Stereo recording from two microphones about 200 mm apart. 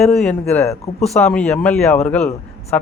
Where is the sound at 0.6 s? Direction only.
30° left (ahead or behind).